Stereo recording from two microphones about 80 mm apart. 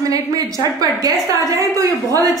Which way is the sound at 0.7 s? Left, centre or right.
Right.